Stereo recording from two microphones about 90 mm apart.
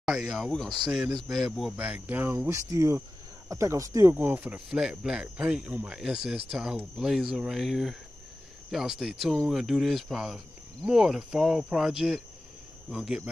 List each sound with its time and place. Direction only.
0.0 s speech: centre (ahead or behind)
0.8 s speech: 10° right (ahead or behind)
2.4 s speech: 35° right (ahead or behind)
4.1 s speech: 20° right (ahead or behind)
4.6 s speech: 10° right (ahead or behind)